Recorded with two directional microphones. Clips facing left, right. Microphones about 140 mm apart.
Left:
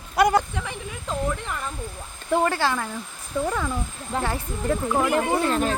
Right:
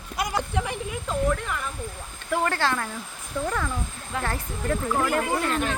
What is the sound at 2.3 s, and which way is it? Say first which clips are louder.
Speech: left 3 dB; 15° left (ahead or behind).